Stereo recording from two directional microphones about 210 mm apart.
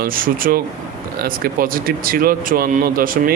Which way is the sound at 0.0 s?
40° right (ahead or behind).